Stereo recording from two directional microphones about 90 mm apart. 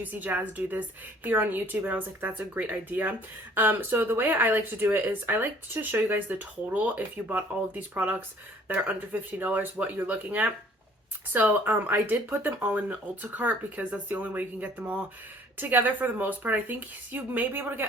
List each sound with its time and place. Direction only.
0.0 s speech: 20° right (ahead or behind)